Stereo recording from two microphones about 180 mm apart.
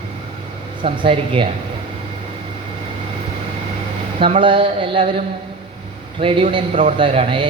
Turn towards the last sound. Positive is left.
turn(degrees=-30)  # may be behind; listen again after turning